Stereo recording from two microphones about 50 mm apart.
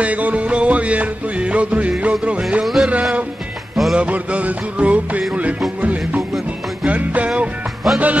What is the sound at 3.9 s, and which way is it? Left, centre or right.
Music, right.